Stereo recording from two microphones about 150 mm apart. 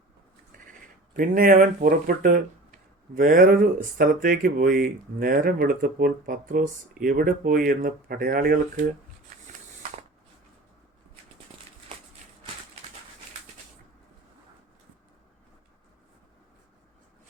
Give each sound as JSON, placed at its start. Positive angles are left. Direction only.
{"t": 0.5, "sound": "bleat", "side_deg": -65}
{"t": 1.1, "sound": "speech", "side_deg": -70}